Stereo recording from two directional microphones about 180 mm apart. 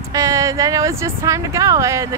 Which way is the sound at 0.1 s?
20° right (ahead or behind).